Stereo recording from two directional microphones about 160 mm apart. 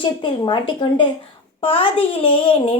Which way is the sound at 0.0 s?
30° left (ahead or behind).